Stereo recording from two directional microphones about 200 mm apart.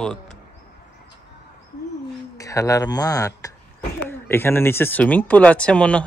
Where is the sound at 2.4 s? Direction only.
15° left (ahead or behind).